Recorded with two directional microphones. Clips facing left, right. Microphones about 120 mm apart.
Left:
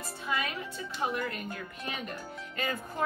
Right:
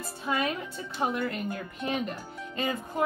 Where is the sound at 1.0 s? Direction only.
30° right (ahead or behind).